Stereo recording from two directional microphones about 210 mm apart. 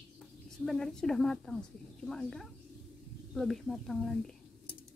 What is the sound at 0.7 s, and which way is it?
Speech, centre (ahead or behind).